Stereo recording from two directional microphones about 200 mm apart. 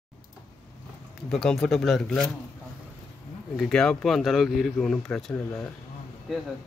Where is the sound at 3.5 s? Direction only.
Centre (ahead or behind).